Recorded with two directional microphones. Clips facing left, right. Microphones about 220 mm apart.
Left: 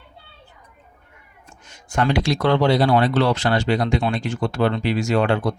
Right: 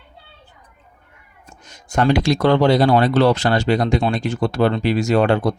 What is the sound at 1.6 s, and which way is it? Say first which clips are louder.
Speech: right 4 dB; 40° right (ahead or behind).